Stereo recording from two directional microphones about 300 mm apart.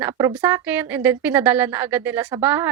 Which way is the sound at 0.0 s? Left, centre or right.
Centre.